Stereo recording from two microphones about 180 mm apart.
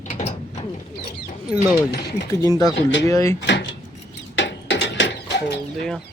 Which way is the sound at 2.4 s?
20° left (ahead or behind).